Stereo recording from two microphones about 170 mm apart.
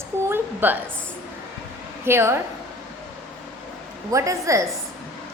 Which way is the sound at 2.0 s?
15° right (ahead or behind).